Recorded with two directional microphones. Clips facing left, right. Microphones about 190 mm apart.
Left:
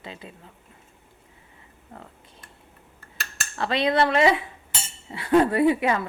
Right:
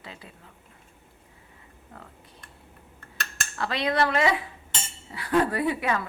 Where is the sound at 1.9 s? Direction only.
25° left (ahead or behind).